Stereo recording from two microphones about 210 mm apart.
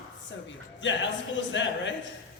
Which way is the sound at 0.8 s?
60° left (ahead or behind).